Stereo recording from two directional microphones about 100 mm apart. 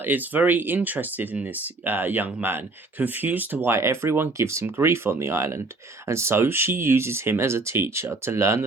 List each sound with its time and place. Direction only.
0.0 s speech: 20° right (ahead or behind)